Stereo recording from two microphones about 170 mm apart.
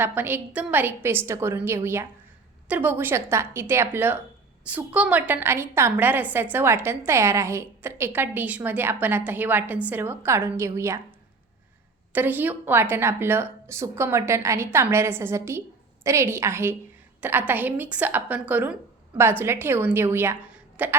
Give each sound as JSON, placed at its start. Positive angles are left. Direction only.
{"t": 0.0, "sound": "a woman's voice", "side_deg": -10}
{"t": 12.1, "sound": "a woman's voice", "side_deg": -10}